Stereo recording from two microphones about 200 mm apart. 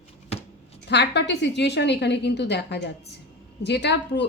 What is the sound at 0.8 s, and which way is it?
Speech, 55° left (ahead or behind).